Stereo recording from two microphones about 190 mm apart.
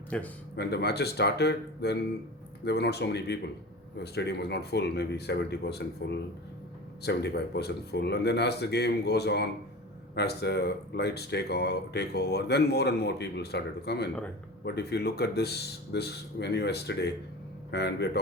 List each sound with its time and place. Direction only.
0.1 s speech: 5° left (ahead or behind)
0.5 s speech: 60° left (ahead or behind)